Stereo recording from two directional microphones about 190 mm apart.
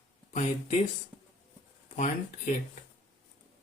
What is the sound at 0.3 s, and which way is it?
Speech, 40° left (ahead or behind).